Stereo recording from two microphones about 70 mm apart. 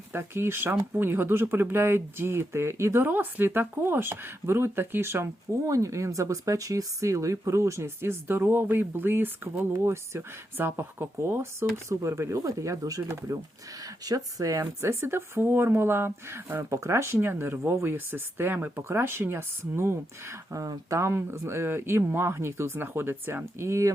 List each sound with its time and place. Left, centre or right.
0.1 s speech: right
14.6 s speech: right